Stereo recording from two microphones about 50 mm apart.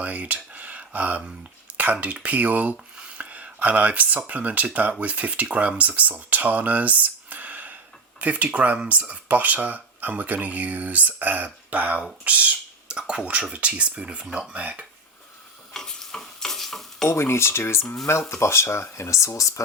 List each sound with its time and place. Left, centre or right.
0.0 s speech: right
2.7 s a sound: centre
4.3 s speech: right
12.9 s speech: centre
15.7 s stir: centre
17.1 s speech: left